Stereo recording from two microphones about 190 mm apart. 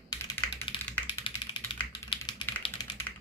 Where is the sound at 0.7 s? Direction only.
25° left (ahead or behind).